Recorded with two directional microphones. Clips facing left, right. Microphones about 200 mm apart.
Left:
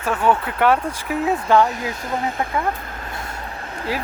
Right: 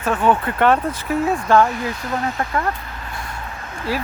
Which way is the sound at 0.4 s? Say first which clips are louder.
Right 1 dB; 10° left (ahead or behind).